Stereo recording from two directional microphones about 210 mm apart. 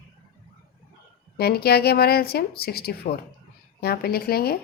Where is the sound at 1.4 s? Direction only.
50° left (ahead or behind).